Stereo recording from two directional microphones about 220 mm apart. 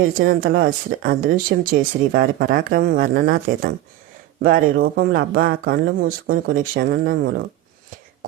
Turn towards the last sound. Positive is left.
turn(degrees=-45)  # may be behind; listen again after turning